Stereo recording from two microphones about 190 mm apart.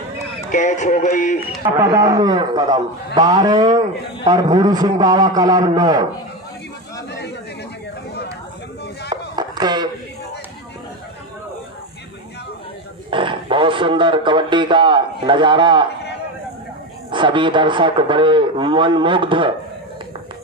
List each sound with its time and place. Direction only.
0.5 s speech: 40° left (ahead or behind)
1.8 s speech: 15° right (ahead or behind)
9.3 s a sound: 20° right (ahead or behind)
13.1 s speech: 25° right (ahead or behind)
17.1 s speech: 25° right (ahead or behind)